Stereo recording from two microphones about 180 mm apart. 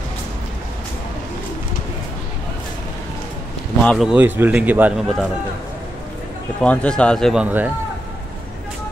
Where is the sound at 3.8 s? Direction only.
Centre (ahead or behind).